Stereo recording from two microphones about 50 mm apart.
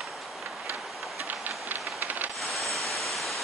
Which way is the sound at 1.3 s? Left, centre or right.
Right.